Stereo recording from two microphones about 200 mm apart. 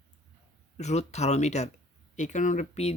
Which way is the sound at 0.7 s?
35° left (ahead or behind).